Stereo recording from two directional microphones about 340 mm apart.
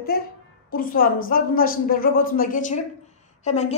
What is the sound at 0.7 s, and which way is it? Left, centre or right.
Speech, left.